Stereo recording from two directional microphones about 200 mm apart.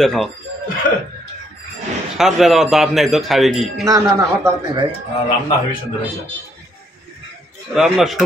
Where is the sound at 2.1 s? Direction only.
Centre (ahead or behind).